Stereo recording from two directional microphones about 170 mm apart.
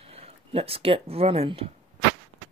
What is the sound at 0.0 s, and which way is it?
Speech, 35° right (ahead or behind).